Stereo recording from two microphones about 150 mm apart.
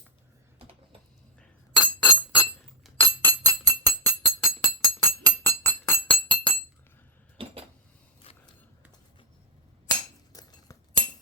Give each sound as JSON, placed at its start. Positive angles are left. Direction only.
{"t": 1.4, "sound": "glass", "side_deg": 10}
{"t": 3.0, "sound": "music", "side_deg": 15}
{"t": 4.4, "sound": "glass", "side_deg": 10}
{"t": 10.3, "sound": "glass", "side_deg": 25}